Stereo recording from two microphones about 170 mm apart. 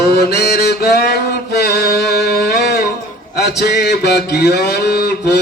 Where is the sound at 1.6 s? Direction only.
70° left (ahead or behind).